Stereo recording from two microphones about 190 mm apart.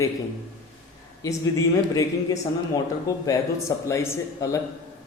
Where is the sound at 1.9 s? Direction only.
20° left (ahead or behind).